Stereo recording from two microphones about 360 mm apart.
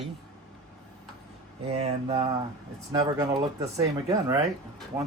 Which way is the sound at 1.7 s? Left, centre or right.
Centre.